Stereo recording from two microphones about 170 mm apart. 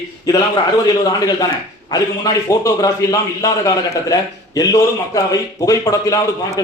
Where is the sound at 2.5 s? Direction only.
20° left (ahead or behind).